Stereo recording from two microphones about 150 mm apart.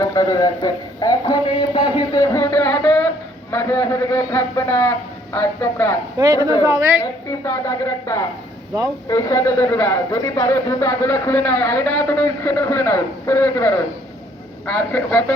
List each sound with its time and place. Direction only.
0.0 s speech: 25° left (ahead or behind)
2.1 s a sound: 20° left (ahead or behind)
3.5 s a man's voice: 15° left (ahead or behind)
6.7 s a woman's voice: 20° right (ahead or behind)
7.0 s a woman's voice: 20° left (ahead or behind)